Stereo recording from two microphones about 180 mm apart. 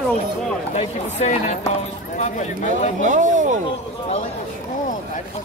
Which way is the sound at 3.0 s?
45° right (ahead or behind).